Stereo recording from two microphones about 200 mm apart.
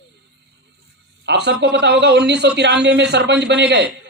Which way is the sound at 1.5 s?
55° right (ahead or behind).